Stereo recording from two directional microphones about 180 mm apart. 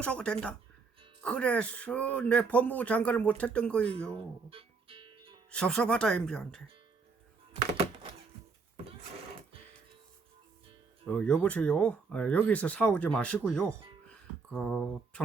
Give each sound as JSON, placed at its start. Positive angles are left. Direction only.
{"t": 0.0, "sound": "speech", "side_deg": 5}
{"t": 4.4, "sound": "music", "side_deg": -30}
{"t": 5.5, "sound": "speech", "side_deg": 5}
{"t": 11.0, "sound": "speech", "side_deg": 5}
{"t": 14.1, "sound": "a sound", "side_deg": 5}